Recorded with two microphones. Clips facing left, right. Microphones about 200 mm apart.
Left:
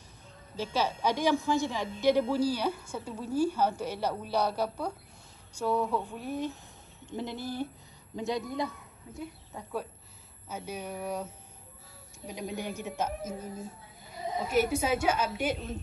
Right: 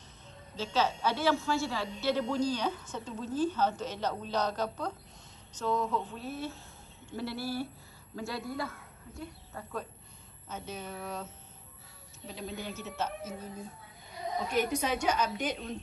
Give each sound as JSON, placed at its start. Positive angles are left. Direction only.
{"t": 0.6, "sound": "a woman's voice", "side_deg": 10}
{"t": 12.3, "sound": "a woman's voice", "side_deg": 15}